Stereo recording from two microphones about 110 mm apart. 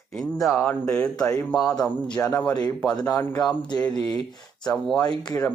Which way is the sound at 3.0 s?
25° left (ahead or behind).